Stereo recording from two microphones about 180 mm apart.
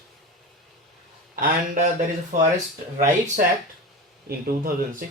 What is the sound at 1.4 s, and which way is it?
Speech, 50° right (ahead or behind).